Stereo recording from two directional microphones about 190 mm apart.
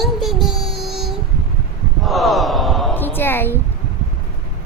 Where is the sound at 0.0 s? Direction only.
Centre (ahead or behind).